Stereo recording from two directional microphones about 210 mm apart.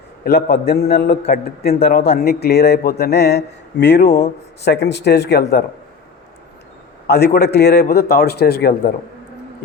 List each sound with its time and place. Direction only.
0.3 s speech: 50° left (ahead or behind)
7.1 s speech: 50° left (ahead or behind)